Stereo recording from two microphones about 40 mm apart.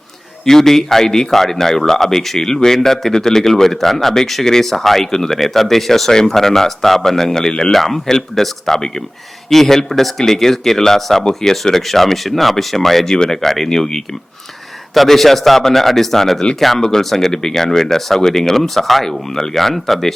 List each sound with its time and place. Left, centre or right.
0.4 s a man's voice: centre
7.7 s a man's voice: centre
13.1 s speech: centre
13.4 s a man's voice: centre